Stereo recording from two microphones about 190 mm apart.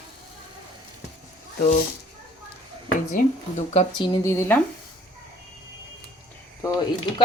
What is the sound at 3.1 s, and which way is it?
Speech, 35° left (ahead or behind).